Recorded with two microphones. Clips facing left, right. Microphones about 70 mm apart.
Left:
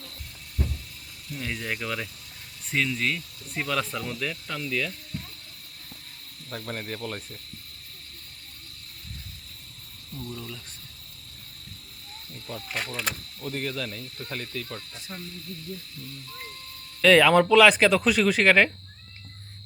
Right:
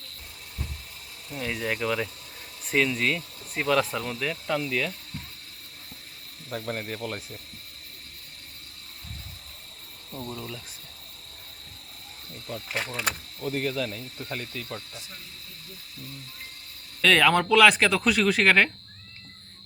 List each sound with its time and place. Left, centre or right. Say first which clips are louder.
1.4 s speech: right 3 dB; centre
6.5 s speech: right 2 dB; centre
10.1 s a sound: right 2 dB; right
10.3 s a sound: right 2 dB; centre
12.7 s speech: right 2 dB; centre
17.0 s speech: left 3 dB; centre